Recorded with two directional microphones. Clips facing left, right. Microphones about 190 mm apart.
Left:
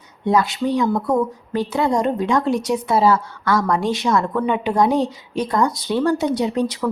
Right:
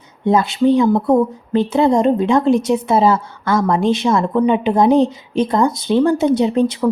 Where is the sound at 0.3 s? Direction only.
25° right (ahead or behind).